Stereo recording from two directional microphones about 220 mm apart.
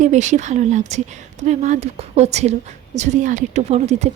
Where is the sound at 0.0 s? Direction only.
35° right (ahead or behind).